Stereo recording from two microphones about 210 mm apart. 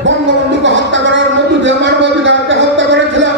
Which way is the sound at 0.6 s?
60° right (ahead or behind).